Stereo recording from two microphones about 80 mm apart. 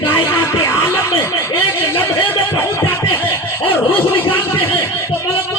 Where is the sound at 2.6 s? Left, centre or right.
Left.